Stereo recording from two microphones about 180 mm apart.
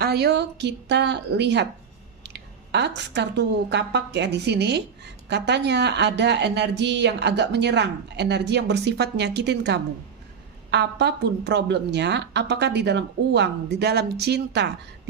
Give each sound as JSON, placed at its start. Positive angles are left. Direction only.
{"t": 0.0, "sound": "a woman's voice", "side_deg": -65}